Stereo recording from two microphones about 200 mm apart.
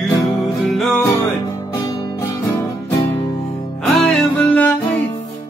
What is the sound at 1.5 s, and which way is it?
Music, 15° left (ahead or behind).